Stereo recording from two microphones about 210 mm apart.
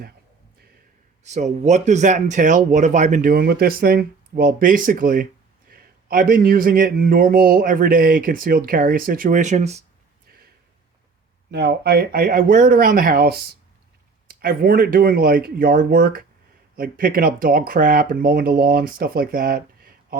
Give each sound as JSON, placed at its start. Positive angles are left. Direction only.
{"t": 1.2, "sound": "speech", "side_deg": -35}
{"t": 11.5, "sound": "speech", "side_deg": -50}